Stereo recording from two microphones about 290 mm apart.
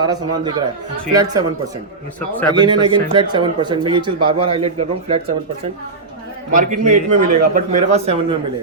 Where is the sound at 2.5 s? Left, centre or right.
Centre.